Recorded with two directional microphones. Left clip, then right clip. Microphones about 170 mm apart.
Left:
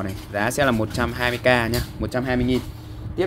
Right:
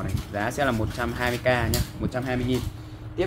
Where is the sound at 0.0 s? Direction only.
50° left (ahead or behind).